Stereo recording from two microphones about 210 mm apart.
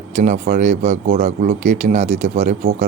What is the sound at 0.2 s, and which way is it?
Speech, 40° right (ahead or behind).